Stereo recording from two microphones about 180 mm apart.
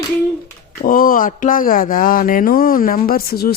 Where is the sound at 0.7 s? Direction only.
55° left (ahead or behind).